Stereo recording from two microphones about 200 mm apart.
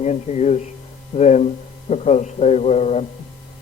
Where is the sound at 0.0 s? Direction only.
35° left (ahead or behind).